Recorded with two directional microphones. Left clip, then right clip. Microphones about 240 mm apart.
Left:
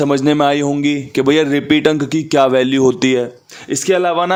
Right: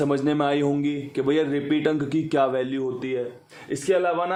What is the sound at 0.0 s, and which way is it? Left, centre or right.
A man's voice, left.